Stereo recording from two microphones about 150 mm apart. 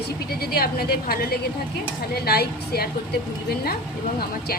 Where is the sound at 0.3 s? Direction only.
90° left.